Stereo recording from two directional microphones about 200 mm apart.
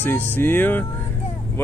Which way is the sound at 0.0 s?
10° left (ahead or behind).